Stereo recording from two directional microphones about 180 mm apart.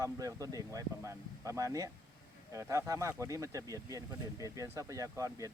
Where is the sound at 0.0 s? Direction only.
20° right (ahead or behind).